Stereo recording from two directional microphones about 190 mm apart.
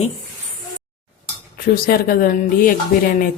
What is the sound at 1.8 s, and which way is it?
Speech, 50° left (ahead or behind).